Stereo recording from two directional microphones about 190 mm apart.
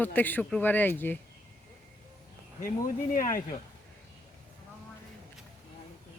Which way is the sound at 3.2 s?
45° left (ahead or behind).